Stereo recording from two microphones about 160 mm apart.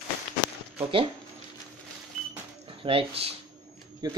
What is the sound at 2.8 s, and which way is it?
Speech, 35° right (ahead or behind).